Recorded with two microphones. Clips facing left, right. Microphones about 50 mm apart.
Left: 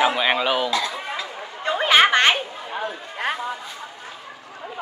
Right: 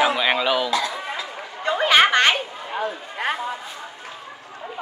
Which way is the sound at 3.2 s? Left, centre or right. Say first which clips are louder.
Right 1 dB; centre.